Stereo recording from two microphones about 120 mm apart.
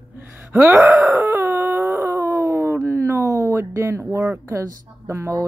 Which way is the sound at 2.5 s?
20° right (ahead or behind).